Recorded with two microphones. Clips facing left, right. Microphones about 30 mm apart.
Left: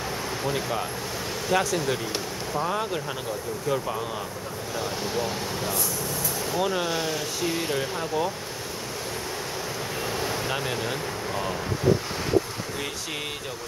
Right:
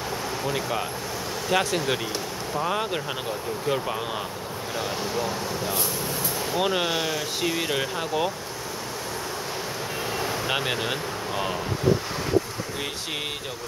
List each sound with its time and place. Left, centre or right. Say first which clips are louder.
0.5 s speech: even; centre
1.5 s speech: right 1 dB; right
6.5 s speech: right 2 dB; right
10.5 s speech: right 2 dB; right